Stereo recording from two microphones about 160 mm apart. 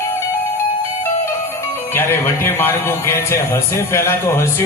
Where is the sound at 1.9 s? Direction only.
15° left (ahead or behind).